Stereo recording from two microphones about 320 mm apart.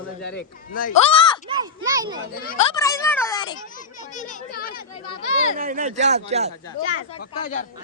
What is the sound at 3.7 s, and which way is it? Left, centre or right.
A child's voice, left.